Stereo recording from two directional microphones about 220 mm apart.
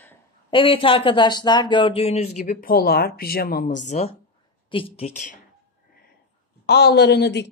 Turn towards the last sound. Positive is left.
turn(degrees=50)  # may be behind; listen again after turning